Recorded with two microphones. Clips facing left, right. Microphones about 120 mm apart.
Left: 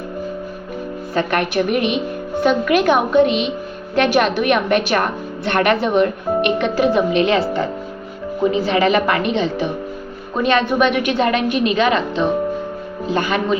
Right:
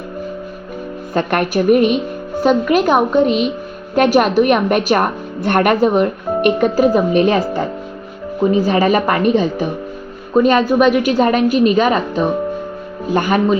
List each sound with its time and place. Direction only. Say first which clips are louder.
1.1 s a woman's voice: right 2 dB; 45° right (ahead or behind)